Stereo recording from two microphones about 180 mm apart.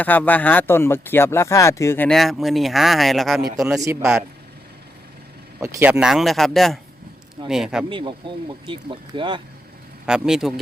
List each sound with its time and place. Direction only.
0.0 s speech: 10° left (ahead or behind)
2.0 s speech: centre (ahead or behind)
5.5 s speech: 10° right (ahead or behind)
7.9 s speech: 25° right (ahead or behind)
10.1 s speech: 5° right (ahead or behind)